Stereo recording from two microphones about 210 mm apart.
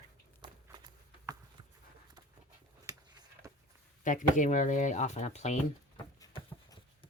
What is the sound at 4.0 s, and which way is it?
Speech, 40° left (ahead or behind).